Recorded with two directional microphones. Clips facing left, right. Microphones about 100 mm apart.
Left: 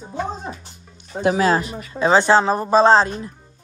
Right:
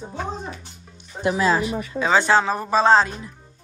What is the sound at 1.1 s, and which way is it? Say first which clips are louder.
Speech: left 4 dB; 90° left.